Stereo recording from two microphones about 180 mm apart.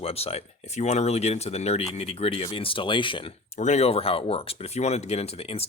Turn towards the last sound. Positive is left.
turn(degrees=35)  # may be behind; listen again after turning